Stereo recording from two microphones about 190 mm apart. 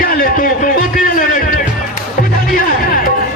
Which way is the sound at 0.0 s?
50° left (ahead or behind).